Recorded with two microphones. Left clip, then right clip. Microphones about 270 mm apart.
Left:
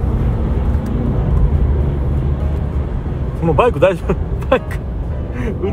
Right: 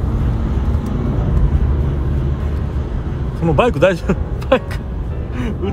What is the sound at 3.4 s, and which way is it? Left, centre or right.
A man's voice, right.